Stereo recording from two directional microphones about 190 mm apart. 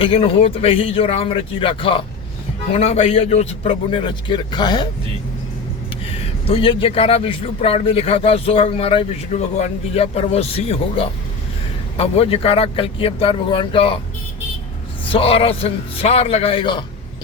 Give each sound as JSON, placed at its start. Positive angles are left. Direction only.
{"t": 0.0, "sound": "a man's voice", "side_deg": 30}
{"t": 6.5, "sound": "speech", "side_deg": 30}
{"t": 15.0, "sound": "speech", "side_deg": 30}